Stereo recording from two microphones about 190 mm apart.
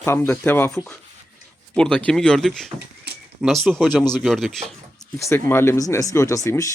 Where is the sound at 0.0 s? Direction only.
15° left (ahead or behind).